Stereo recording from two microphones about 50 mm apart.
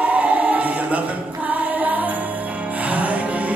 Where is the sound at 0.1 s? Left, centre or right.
Right.